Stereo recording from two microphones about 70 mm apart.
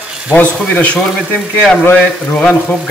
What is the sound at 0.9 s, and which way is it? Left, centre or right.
Speech, centre.